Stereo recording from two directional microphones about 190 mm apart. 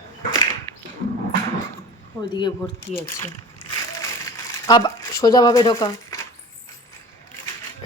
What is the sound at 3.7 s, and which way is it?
Crumpling, 15° left (ahead or behind).